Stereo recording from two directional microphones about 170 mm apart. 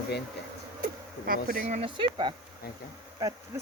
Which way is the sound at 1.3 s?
60° right (ahead or behind).